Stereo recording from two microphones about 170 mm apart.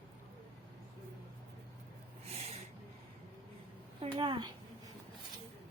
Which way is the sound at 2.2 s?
35° right (ahead or behind).